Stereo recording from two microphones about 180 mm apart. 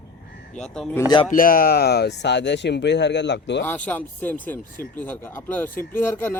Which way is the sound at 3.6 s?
10° left (ahead or behind).